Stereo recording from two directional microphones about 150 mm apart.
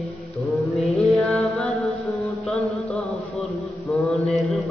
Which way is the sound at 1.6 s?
Centre (ahead or behind).